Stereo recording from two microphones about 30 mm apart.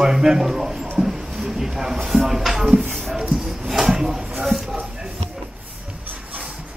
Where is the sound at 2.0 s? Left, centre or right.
Centre.